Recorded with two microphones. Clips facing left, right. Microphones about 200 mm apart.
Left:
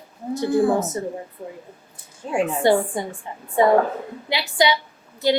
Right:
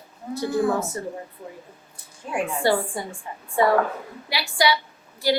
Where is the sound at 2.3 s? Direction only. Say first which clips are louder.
Left 4 dB; 20° left (ahead or behind).